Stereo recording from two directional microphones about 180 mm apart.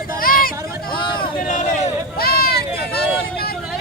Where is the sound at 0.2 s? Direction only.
55° left (ahead or behind).